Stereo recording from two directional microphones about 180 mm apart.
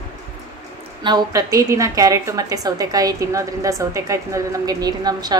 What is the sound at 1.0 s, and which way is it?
A woman's voice, 25° right (ahead or behind).